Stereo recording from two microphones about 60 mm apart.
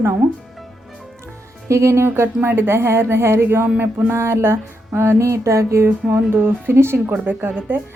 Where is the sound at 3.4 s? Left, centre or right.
Right.